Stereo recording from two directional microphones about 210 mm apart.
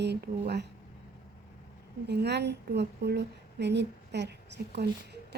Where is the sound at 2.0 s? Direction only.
55° right (ahead or behind).